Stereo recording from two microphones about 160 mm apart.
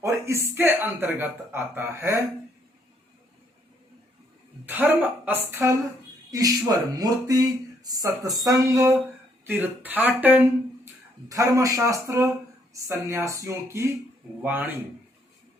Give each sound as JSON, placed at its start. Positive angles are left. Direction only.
{"t": 0.0, "sound": "speech", "side_deg": -20}
{"t": 4.6, "sound": "speech", "side_deg": -10}
{"t": 11.3, "sound": "speech", "side_deg": -20}